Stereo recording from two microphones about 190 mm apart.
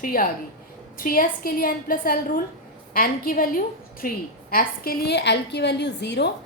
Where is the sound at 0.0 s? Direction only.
45° left (ahead or behind).